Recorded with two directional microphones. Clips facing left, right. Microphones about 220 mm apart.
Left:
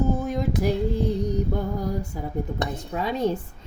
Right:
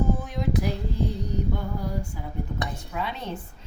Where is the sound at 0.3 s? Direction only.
45° left (ahead or behind).